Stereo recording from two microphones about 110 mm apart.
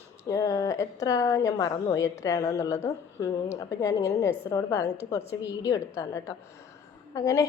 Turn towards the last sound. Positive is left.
turn(degrees=30)  # may be behind; listen again after turning